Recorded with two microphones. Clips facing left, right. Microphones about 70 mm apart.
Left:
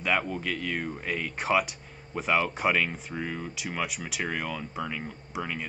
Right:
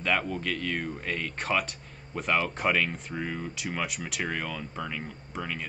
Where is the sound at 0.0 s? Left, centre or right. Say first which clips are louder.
Even; centre.